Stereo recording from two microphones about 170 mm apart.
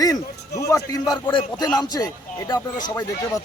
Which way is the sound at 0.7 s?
20° left (ahead or behind).